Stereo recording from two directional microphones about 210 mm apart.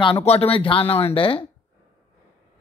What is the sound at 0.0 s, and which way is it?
Speech, 25° left (ahead or behind).